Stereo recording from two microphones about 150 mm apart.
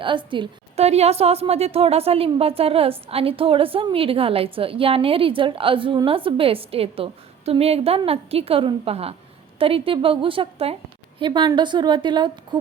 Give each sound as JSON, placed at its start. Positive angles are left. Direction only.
{"t": 0.0, "sound": "a woman's voice", "side_deg": -35}